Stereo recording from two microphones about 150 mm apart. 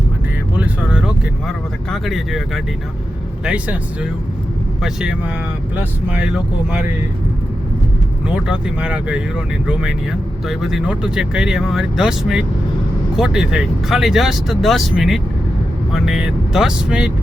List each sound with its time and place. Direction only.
0.5 s speech: 10° right (ahead or behind)
3.4 s speech: 5° right (ahead or behind)
8.3 s speech: 5° right (ahead or behind)